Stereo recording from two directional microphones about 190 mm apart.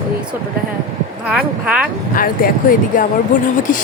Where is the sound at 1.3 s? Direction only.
5° right (ahead or behind).